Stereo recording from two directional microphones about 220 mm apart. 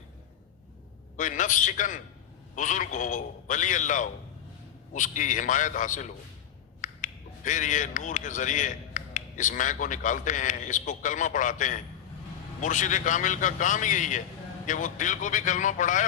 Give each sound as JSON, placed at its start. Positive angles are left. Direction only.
{"t": 1.1, "sound": "a man's voice", "side_deg": 35}